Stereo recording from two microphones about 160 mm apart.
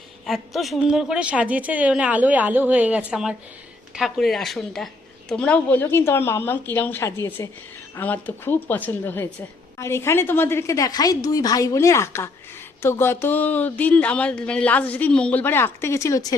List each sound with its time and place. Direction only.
0.3 s a woman's voice: centre (ahead or behind); by 16.2 s 20° left (ahead or behind)